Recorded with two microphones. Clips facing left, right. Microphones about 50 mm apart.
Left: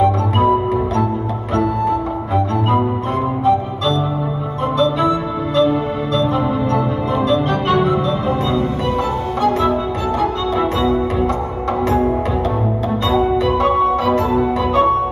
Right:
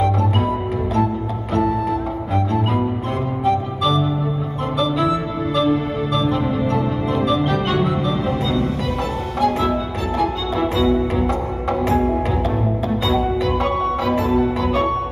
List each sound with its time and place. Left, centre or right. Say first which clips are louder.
0.0 s music: left 5 dB; centre
3.4 s music: left 2 dB; centre
6.1 s music: left 3 dB; centre
10.1 s music: left 1 dB; centre
11.8 s music: left 2 dB; centre
13.1 s music: left 5 dB; centre
14.0 s music: left 2 dB; centre